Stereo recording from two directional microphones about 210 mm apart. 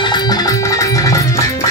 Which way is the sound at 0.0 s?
20° left (ahead or behind).